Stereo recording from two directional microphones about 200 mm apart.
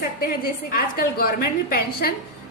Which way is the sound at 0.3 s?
45° left (ahead or behind).